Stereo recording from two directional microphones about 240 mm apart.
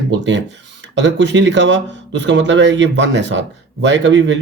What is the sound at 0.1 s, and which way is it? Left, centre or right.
A man's voice, right.